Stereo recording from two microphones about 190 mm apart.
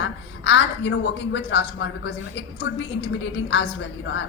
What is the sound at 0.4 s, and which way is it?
A woman's voice, 70° left (ahead or behind).